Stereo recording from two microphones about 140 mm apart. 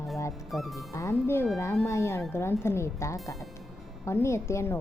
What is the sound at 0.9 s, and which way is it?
A woman's voice, 20° left (ahead or behind).